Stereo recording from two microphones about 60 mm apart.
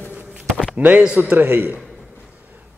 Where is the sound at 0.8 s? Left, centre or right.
Right.